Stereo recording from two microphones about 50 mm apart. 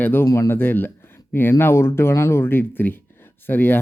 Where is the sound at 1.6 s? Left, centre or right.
Left.